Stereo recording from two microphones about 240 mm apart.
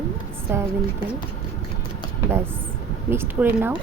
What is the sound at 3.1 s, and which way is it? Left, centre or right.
Speech, centre.